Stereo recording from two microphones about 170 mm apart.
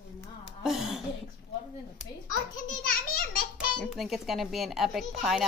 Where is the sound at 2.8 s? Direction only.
55° left (ahead or behind).